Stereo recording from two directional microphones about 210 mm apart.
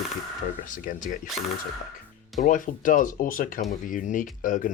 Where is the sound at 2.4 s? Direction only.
40° left (ahead or behind).